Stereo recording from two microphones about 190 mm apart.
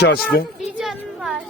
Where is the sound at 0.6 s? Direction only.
Centre (ahead or behind).